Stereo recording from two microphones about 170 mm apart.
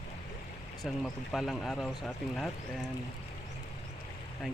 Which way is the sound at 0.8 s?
Centre (ahead or behind).